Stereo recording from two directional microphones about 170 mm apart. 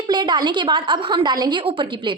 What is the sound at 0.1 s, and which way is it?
A woman's voice, 25° right (ahead or behind).